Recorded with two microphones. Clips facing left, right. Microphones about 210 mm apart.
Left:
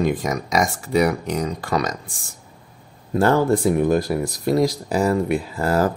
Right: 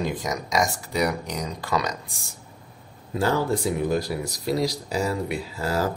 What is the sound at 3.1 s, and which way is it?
Speech, 50° left (ahead or behind).